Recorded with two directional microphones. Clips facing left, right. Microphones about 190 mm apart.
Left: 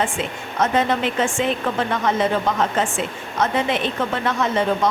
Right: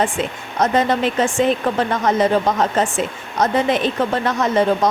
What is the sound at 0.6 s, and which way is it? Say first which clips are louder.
A woman's voice: right 3 dB; 40° right (ahead or behind).